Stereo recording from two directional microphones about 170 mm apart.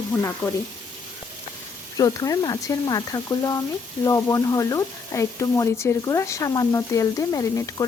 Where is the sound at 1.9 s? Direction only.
20° left (ahead or behind).